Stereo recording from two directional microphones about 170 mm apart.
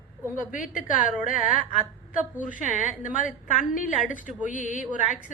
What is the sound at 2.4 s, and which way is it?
A woman's voice, 50° left (ahead or behind).